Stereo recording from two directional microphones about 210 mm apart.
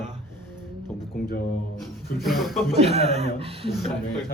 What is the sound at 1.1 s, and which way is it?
Speech, 45° left (ahead or behind).